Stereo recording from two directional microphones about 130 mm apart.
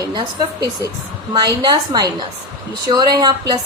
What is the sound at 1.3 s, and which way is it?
A woman's voice, 30° right (ahead or behind).